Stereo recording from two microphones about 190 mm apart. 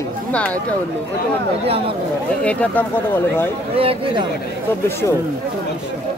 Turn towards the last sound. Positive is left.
turn(degrees=-30)  # may be behind; listen again after turning